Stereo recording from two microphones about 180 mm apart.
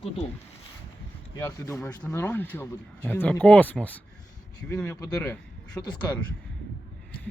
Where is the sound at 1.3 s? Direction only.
15° left (ahead or behind).